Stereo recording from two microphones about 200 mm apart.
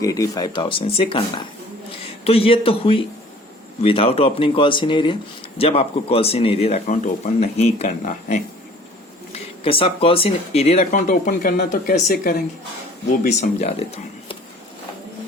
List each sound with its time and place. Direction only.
0.0 s speech: 20° left (ahead or behind)
2.2 s speech: 30° left (ahead or behind)
11.1 s speech: 45° left (ahead or behind)